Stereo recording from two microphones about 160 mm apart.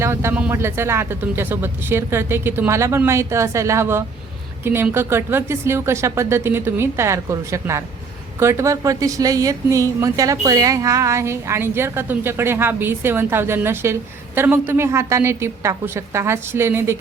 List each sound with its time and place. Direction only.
0.0 s a woman's voice: 15° right (ahead or behind)